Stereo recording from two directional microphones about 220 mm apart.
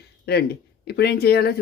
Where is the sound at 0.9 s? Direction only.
45° left (ahead or behind).